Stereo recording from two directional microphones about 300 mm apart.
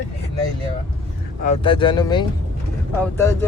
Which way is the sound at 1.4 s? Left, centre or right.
Centre.